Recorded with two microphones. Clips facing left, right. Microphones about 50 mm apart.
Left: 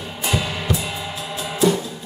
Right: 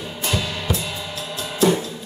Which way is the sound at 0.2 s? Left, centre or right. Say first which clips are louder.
Left 2 dB; centre.